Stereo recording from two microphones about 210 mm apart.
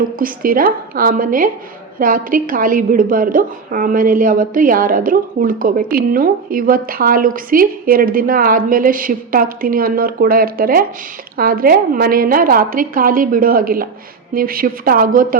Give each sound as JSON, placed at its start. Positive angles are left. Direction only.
{"t": 0.2, "sound": "a woman's voice", "side_deg": -40}